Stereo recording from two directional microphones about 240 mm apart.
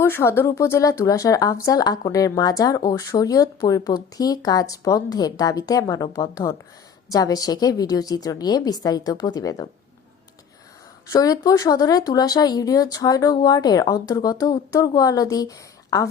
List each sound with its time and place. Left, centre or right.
0.0 s speech: centre
11.1 s speech: centre